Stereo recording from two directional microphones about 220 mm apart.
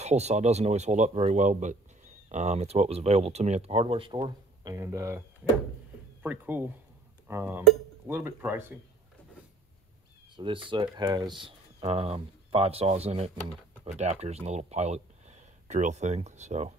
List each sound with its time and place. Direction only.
0.0 s speech: 30° right (ahead or behind); by 8.7 s 10° right (ahead or behind)
10.3 s speech: 20° right (ahead or behind)